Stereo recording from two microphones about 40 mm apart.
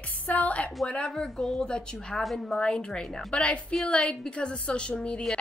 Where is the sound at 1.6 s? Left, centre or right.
Left.